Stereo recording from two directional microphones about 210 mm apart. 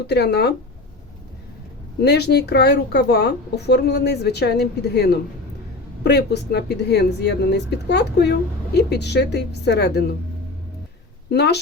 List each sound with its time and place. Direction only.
0.1 s speech: 50° left (ahead or behind)
2.0 s speech: 50° left (ahead or behind)
11.3 s speech: 50° left (ahead or behind)